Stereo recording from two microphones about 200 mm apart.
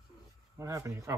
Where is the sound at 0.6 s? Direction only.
15° right (ahead or behind).